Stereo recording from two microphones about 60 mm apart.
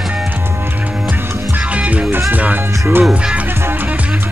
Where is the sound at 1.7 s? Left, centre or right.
Right.